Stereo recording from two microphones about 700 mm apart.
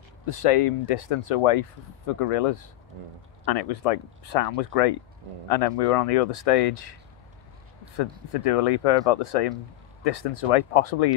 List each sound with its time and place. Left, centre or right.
0.3 s speech: left
8.0 s speech: left